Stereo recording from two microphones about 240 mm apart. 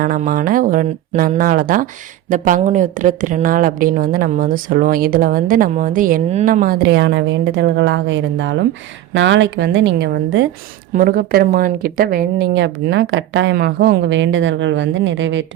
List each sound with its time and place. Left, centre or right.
0.0 s a woman's voice: right